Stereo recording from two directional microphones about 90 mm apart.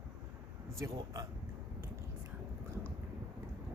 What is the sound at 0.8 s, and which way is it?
Speech, 35° right (ahead or behind).